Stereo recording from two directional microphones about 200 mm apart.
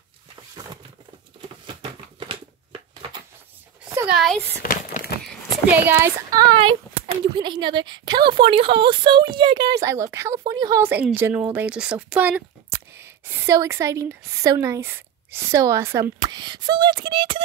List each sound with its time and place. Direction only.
1.7 s crumpling: 25° right (ahead or behind)
4.1 s speech: centre (ahead or behind)
4.6 s a sound: 45° left (ahead or behind)
5.7 s speech: 10° right (ahead or behind)
7.0 s a woman's voice: 20° right (ahead or behind)